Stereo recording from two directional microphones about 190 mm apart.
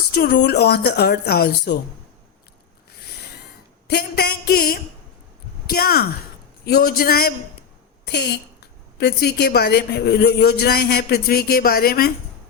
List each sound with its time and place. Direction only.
0.1 s a woman's voice: 55° left (ahead or behind)
3.8 s a woman's voice: 60° left (ahead or behind)